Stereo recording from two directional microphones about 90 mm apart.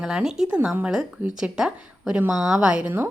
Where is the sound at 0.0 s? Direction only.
5° right (ahead or behind).